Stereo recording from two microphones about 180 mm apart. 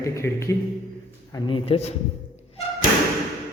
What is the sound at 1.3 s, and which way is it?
Speech, 30° left (ahead or behind).